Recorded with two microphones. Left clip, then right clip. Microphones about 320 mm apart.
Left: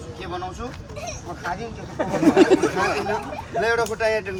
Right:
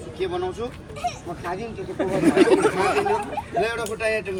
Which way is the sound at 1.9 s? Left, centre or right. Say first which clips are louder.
Left 2 dB; left.